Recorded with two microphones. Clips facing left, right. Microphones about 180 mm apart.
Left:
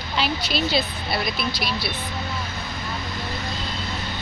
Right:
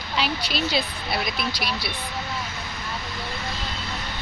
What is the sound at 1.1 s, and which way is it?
Speech, 10° right (ahead or behind).